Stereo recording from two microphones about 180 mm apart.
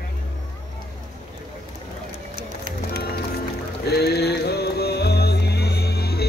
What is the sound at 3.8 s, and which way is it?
Music, 65° left (ahead or behind).